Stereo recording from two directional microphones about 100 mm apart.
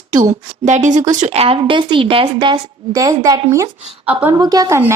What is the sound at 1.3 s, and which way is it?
Speech, 75° right (ahead or behind).